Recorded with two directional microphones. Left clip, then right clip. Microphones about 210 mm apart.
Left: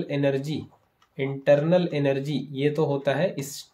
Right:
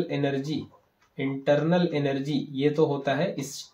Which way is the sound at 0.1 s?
45° left (ahead or behind).